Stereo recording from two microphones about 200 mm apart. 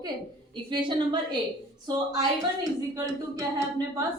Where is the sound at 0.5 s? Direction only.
25° right (ahead or behind).